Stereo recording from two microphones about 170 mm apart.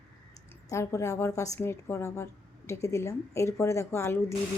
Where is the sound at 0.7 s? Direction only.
15° left (ahead or behind).